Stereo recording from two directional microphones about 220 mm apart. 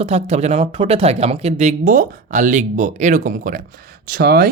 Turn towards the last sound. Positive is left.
turn(degrees=-45)  # may be behind; listen again after turning